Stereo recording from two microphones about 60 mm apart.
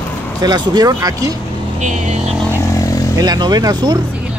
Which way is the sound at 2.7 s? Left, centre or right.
Left.